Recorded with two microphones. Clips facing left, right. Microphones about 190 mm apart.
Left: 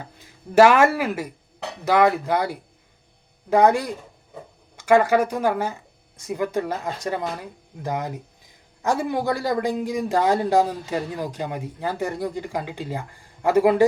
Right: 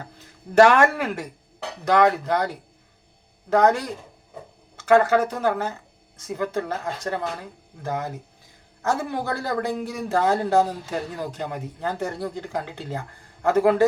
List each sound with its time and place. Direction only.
0.5 s a man's voice: 5° left (ahead or behind)